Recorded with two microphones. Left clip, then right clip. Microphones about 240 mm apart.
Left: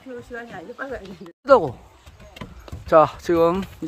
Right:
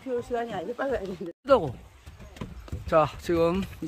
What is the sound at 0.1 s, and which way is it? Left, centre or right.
Speech, right.